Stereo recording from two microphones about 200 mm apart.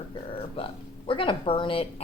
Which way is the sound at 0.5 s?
25° left (ahead or behind).